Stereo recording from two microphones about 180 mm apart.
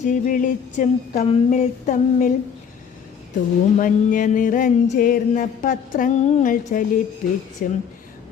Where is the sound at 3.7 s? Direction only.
45° left (ahead or behind).